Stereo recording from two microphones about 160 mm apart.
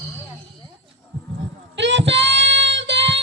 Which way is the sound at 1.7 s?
90° right.